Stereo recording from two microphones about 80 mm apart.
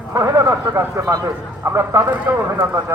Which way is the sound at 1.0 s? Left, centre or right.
Right.